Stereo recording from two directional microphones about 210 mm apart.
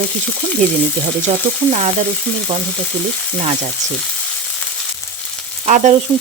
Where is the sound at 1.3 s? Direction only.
30° right (ahead or behind).